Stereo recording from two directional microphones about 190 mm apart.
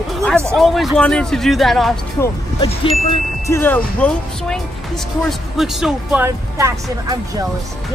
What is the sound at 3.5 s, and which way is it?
Speech, 10° left (ahead or behind).